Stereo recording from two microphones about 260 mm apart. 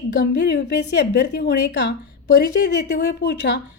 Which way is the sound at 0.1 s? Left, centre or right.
Left.